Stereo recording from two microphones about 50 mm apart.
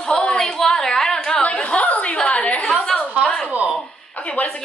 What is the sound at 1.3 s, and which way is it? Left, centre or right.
A woman's voice, left.